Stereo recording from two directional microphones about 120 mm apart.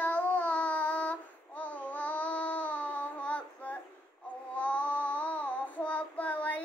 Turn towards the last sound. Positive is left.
turn(degrees=10)  # may be behind; listen again after turning